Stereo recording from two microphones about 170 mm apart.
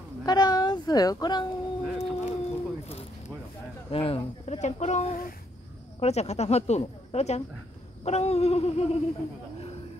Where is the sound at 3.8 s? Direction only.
35° left (ahead or behind).